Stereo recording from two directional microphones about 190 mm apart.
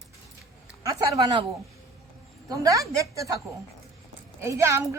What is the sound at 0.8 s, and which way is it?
Speech, 20° right (ahead or behind).